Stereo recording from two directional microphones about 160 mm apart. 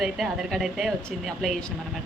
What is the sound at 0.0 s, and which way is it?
Speech, centre (ahead or behind).